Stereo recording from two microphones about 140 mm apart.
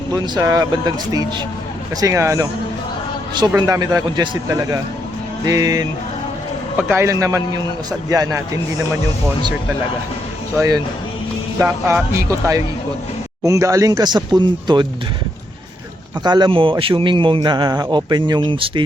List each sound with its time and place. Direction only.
0.1 s speech: 25° right (ahead or behind)
3.7 s speech: 25° right (ahead or behind)
6.9 s speech: 20° right (ahead or behind)
11.6 s speech: 20° right (ahead or behind)
16.2 s a man's voice: 30° right (ahead or behind)